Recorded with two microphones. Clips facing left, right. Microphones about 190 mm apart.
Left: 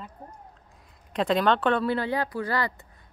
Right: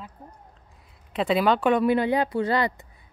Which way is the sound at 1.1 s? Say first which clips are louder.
Right 1 dB; 5° right (ahead or behind).